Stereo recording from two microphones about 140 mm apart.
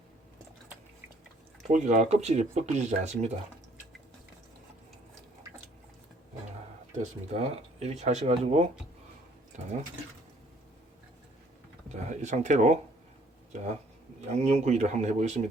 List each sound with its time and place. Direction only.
1.6 s speech: 55° right (ahead or behind)
6.9 s speech: 55° right (ahead or behind)
9.5 s speech: 60° right (ahead or behind)
11.9 s speech: 55° right (ahead or behind)
14.2 s speech: 50° right (ahead or behind)